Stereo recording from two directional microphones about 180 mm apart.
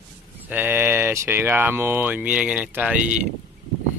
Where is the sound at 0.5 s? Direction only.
10° right (ahead or behind).